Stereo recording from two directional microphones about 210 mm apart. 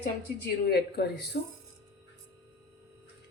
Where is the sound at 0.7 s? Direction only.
50° left (ahead or behind).